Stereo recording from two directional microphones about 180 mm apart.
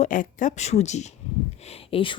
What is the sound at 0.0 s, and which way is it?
A woman's voice, 45° left (ahead or behind).